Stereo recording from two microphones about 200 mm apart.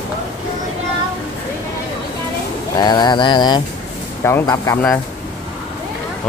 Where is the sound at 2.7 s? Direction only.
20° left (ahead or behind).